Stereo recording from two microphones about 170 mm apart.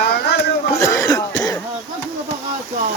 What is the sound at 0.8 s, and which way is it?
Speech, 20° left (ahead or behind).